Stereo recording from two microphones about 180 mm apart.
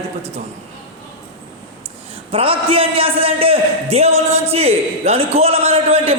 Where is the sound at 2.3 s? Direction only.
30° right (ahead or behind).